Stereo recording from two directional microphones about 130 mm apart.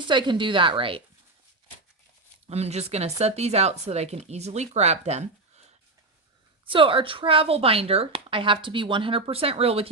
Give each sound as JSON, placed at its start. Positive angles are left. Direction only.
{"t": 0.1, "sound": "a woman's voice", "side_deg": -35}
{"t": 2.5, "sound": "speech", "side_deg": -55}
{"t": 6.7, "sound": "speech", "side_deg": -40}